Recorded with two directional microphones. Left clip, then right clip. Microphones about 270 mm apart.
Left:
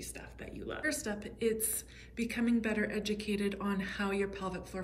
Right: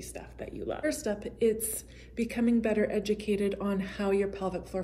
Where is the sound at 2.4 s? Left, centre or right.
Centre.